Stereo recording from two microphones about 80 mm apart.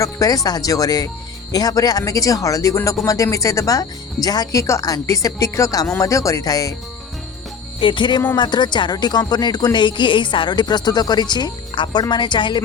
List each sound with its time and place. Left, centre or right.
0.0 s speech: left
7.8 s music: left
8.4 s speech: left